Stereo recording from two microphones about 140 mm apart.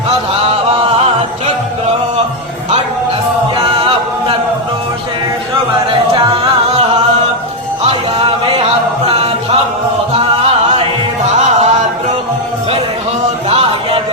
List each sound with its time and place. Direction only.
0.8 s music: 40° right (ahead or behind)
3.6 s a capella: 40° right (ahead or behind)
6.1 s music: 45° right (ahead or behind)
11.3 s a sound: 50° right (ahead or behind)
13.5 s music: 40° right (ahead or behind)